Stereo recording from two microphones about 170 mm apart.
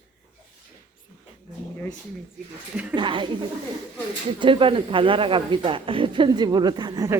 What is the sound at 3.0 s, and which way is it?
Speech, 30° right (ahead or behind).